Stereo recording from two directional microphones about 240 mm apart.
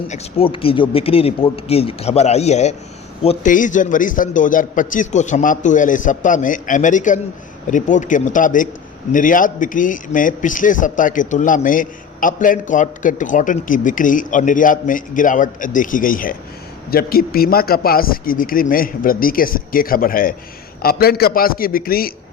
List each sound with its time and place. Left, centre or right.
0.1 s a man's voice: left